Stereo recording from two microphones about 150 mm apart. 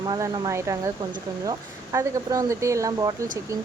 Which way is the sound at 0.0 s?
25° right (ahead or behind).